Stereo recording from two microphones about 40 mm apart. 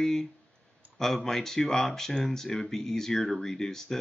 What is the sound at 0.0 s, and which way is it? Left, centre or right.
Speech, centre.